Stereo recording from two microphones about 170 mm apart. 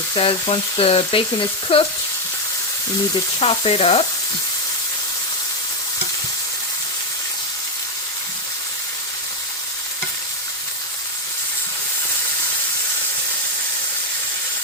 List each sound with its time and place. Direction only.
0.1 s frying: 30° left (ahead or behind)
3.4 s frying: 35° left (ahead or behind)